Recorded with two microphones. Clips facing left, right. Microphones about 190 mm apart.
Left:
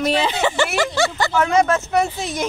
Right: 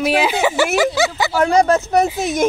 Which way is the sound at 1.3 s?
35° right (ahead or behind).